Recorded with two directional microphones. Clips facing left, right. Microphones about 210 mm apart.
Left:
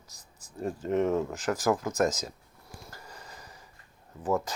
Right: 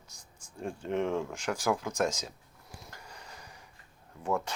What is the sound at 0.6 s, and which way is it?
Speech, 5° left (ahead or behind).